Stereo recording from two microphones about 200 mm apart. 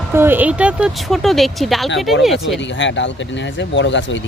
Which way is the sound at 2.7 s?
65° left (ahead or behind).